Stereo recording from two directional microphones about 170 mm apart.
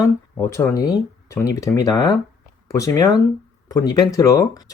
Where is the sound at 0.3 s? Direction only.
15° left (ahead or behind).